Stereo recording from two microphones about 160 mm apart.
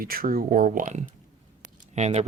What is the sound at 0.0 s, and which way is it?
Speech, 65° right (ahead or behind).